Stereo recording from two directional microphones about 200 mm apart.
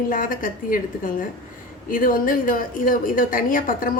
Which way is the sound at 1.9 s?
45° left (ahead or behind).